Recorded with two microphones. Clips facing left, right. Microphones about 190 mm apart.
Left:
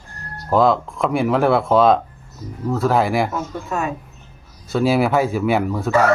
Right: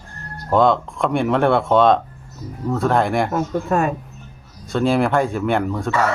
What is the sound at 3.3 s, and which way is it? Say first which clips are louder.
Speech: right 5 dB; 50° right (ahead or behind).